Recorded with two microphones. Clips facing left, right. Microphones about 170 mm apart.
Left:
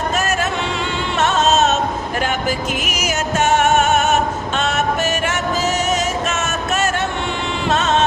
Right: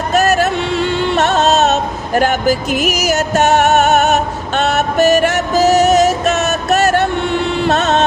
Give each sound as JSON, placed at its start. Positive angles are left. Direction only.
{"t": 0.4, "sound": "music", "side_deg": -65}
{"t": 1.6, "sound": "a sound", "side_deg": -40}
{"t": 3.1, "sound": "music", "side_deg": -40}
{"t": 4.0, "sound": "music", "side_deg": -65}
{"t": 4.6, "sound": "music", "side_deg": -40}
{"t": 7.7, "sound": "music", "side_deg": -65}